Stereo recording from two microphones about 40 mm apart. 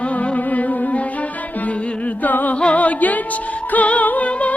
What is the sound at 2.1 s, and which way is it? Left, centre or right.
Music, left.